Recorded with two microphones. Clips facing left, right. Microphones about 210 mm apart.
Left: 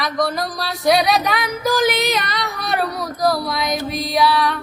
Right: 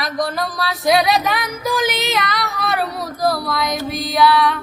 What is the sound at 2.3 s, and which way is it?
Female singing, centre (ahead or behind).